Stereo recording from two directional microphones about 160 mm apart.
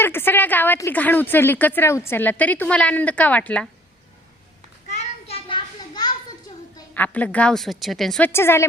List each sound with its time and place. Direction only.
0.0 s a woman's voice: 15° left (ahead or behind)
4.9 s a sound: 40° left (ahead or behind); by 6.1 s 25° left (ahead or behind)
6.9 s a woman's voice: 10° left (ahead or behind)
8.3 s a woman's voice: 15° left (ahead or behind)